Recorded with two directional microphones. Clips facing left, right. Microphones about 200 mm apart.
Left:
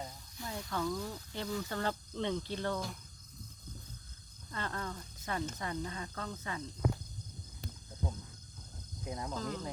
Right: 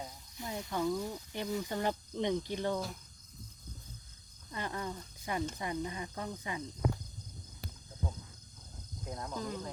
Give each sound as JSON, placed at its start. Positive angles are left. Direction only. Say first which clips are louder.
{"t": 0.3, "sound": "speech", "louder": "right 2 dB", "side_deg": -20}
{"t": 4.5, "sound": "speech", "louder": "right 1 dB", "side_deg": -15}
{"t": 9.0, "sound": "speech", "louder": "left 2 dB", "side_deg": 5}
{"t": 9.3, "sound": "speech", "louder": "right 1 dB", "side_deg": -15}